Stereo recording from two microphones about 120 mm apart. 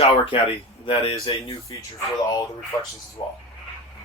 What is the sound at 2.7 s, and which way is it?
Speech, 30° left (ahead or behind).